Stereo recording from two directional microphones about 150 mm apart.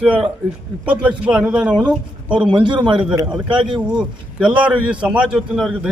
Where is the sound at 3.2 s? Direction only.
5° right (ahead or behind).